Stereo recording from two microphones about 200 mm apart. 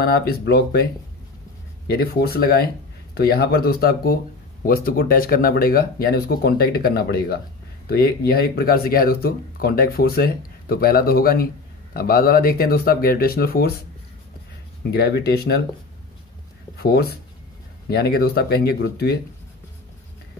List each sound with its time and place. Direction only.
0.0 s speech: 50° left (ahead or behind)
1.9 s speech: 50° left (ahead or behind)
14.8 s speech: 50° left (ahead or behind)
16.7 s speech: 50° left (ahead or behind)